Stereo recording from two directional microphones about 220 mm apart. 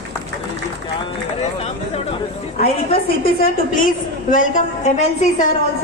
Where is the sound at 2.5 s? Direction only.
35° left (ahead or behind).